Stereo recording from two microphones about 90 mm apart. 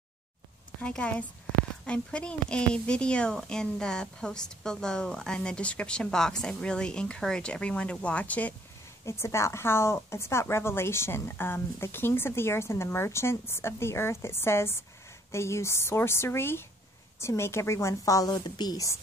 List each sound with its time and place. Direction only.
0.7 s a woman's voice: 15° left (ahead or behind)
9.0 s a woman's voice: 30° left (ahead or behind); by 18.9 s 50° left (ahead or behind)